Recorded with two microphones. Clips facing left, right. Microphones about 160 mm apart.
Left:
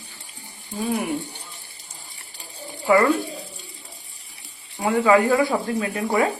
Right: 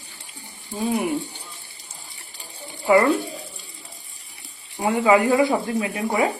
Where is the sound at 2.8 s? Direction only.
20° right (ahead or behind).